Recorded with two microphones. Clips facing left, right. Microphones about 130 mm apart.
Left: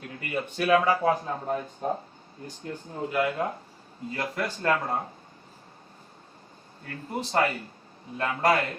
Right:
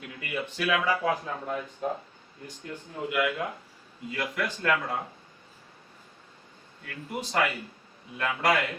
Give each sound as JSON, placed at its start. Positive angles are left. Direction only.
{"t": 0.1, "sound": "speech", "side_deg": 35}
{"t": 6.8, "sound": "speech", "side_deg": 35}